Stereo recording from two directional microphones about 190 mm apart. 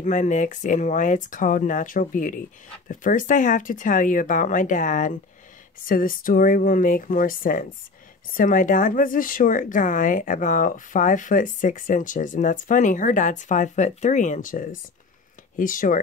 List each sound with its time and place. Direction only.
0.0 s speech: 40° left (ahead or behind)